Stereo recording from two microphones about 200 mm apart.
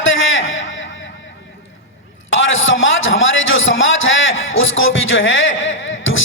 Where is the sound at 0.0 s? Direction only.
75° left (ahead or behind).